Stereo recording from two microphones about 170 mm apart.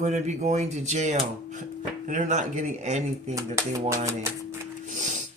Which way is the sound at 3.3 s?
20° right (ahead or behind).